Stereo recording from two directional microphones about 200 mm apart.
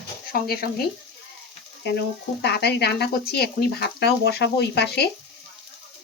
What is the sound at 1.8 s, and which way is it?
Speech, 55° left (ahead or behind).